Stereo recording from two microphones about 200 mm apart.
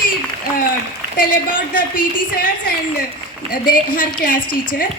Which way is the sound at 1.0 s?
50° right (ahead or behind).